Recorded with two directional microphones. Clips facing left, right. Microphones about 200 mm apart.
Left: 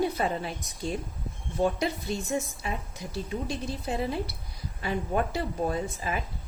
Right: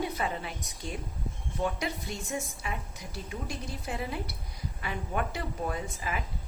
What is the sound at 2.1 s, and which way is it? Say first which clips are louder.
Speech: left 6 dB; 30° left (ahead or behind).